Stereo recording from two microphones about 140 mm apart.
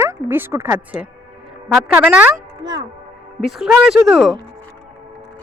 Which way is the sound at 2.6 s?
30° right (ahead or behind).